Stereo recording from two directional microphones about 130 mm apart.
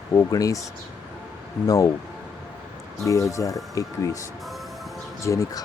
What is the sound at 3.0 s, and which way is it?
Speech, 25° left (ahead or behind).